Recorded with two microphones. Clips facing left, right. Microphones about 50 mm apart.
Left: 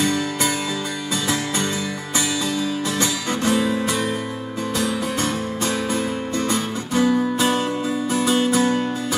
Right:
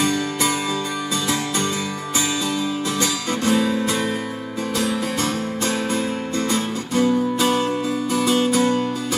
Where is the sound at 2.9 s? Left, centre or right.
Left.